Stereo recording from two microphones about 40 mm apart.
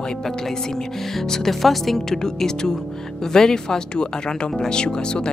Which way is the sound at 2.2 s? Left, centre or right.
Centre.